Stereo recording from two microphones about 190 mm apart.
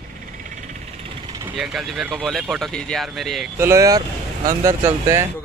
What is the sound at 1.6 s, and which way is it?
Speech, centre (ahead or behind).